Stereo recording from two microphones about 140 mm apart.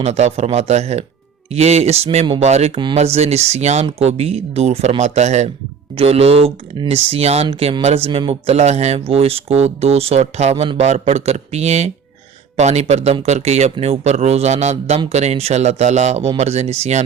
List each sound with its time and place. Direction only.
0.0 s a man's voice: 50° right (ahead or behind)